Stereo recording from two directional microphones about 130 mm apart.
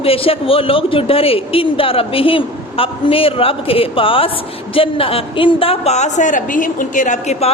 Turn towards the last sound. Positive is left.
turn(degrees=65)  # may be behind; listen again after turning